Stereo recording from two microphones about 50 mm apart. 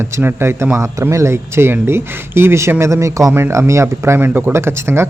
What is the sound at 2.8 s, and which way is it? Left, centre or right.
Speech, right.